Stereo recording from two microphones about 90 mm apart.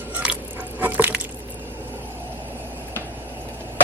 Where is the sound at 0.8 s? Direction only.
20° right (ahead or behind).